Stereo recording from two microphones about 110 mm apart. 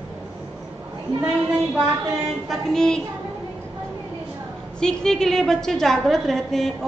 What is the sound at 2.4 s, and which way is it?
Speech, 5° left (ahead or behind).